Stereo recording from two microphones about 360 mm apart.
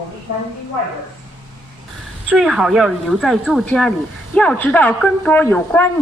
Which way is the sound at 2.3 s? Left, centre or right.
Centre.